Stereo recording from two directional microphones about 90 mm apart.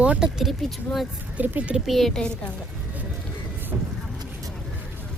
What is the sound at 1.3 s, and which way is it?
Speech, 20° right (ahead or behind).